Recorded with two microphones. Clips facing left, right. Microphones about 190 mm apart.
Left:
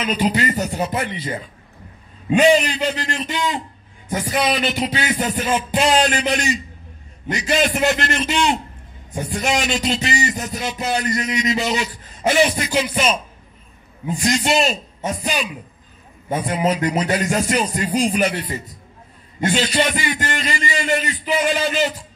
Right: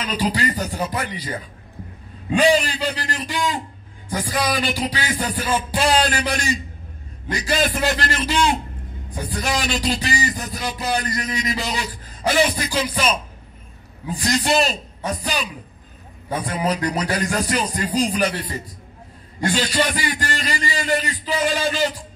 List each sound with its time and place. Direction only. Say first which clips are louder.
0.0 s a man's voice: left 3 dB; 20° left (ahead or behind)
16.4 s a man's voice: left 3 dB; 25° left (ahead or behind)
19.4 s a man's voice: left 2 dB; 25° left (ahead or behind)